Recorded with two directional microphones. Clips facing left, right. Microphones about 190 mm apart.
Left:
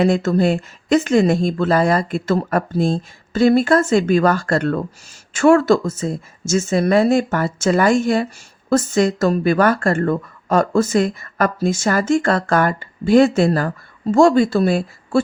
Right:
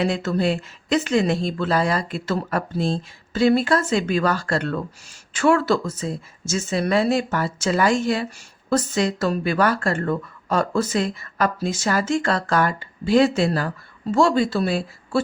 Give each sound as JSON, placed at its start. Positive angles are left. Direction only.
{"t": 0.0, "sound": "a woman's voice", "side_deg": 45}